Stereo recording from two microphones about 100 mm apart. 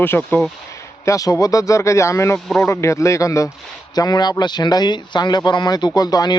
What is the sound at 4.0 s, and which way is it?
Speech, 45° left (ahead or behind).